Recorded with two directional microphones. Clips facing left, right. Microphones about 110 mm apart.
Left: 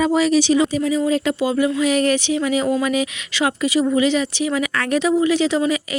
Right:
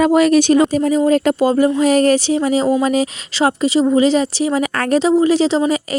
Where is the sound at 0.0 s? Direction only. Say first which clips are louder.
Right 5 dB; 55° right (ahead or behind).